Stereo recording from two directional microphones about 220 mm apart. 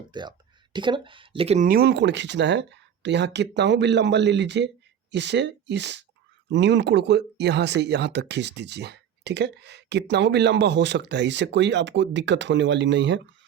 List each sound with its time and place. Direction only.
0.1 s speech: 20° right (ahead or behind); by 13.2 s 55° right (ahead or behind)